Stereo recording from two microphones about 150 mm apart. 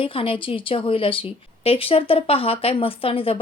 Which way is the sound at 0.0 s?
35° left (ahead or behind).